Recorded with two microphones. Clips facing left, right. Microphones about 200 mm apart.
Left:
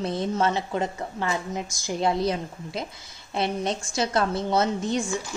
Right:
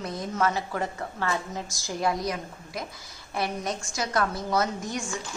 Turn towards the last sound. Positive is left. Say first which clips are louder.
# left 4 dB
turn(degrees=25)  # may be behind; listen again after turning